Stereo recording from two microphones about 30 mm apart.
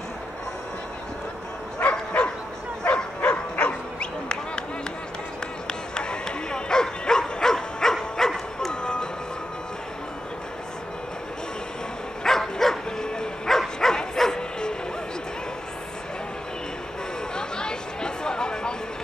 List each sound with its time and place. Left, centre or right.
1.8 s bow-wow: left
3.3 s dog: left
5.7 s bow-wow: left
8.8 s music: left
12.2 s dog: centre
13.0 s bow-wow: left
13.5 s dog: centre
17.4 s chatter: left